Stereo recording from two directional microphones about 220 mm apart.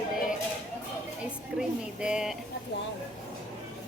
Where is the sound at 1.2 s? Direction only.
5° right (ahead or behind).